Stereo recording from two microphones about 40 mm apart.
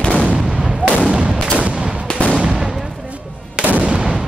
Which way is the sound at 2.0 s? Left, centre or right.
Left.